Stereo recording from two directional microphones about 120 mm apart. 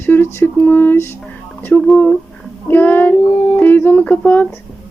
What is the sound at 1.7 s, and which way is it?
Speech, 5° left (ahead or behind).